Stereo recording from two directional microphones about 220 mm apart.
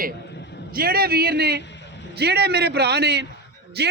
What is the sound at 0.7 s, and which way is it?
Speech, 45° right (ahead or behind).